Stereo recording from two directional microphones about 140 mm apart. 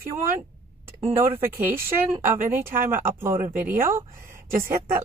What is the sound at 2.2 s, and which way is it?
Speech, 15° right (ahead or behind).